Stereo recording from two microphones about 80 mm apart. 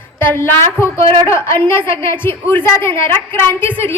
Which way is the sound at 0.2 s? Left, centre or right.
Left.